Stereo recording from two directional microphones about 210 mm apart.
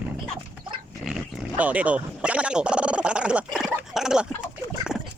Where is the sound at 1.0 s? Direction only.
5° right (ahead or behind).